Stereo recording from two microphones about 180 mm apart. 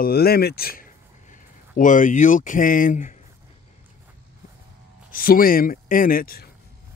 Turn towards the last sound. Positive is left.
turn(degrees=55)  # may be behind; listen again after turning